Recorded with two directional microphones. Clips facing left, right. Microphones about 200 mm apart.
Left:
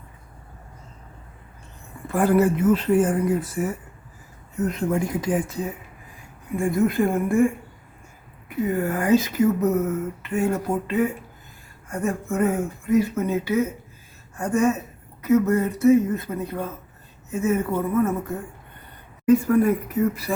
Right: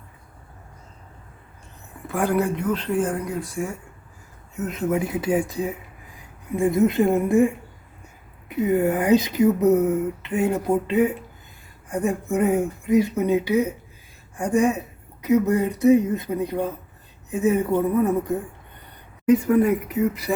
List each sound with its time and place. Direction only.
2.0 s a woman's voice: centre (ahead or behind); by 20.3 s 20° right (ahead or behind)